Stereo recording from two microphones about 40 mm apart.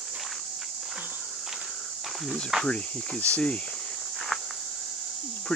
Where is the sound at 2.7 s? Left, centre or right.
Left.